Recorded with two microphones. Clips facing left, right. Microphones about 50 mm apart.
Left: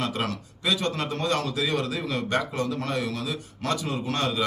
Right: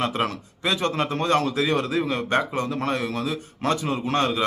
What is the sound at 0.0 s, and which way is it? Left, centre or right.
A man's voice, right.